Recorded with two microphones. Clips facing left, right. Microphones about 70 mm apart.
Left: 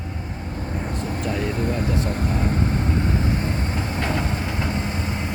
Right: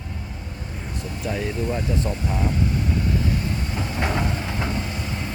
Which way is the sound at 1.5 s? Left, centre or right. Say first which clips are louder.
Left 1 dB; left.